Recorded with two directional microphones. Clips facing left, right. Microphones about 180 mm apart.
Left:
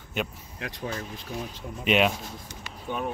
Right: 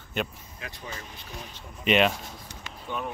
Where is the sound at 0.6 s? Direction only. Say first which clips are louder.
Left 7 dB; 90° left.